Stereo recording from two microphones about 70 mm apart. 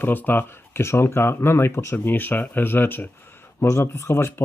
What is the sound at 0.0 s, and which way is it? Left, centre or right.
Speech, left.